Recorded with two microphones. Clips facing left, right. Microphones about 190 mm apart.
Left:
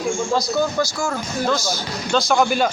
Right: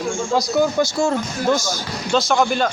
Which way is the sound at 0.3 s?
20° right (ahead or behind).